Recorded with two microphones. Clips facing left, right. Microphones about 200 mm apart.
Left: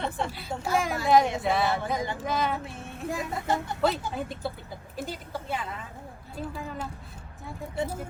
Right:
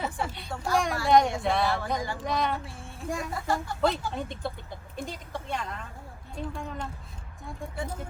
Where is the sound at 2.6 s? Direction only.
20° left (ahead or behind).